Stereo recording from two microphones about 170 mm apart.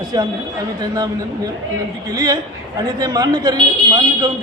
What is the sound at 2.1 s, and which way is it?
A man's voice, 20° right (ahead or behind).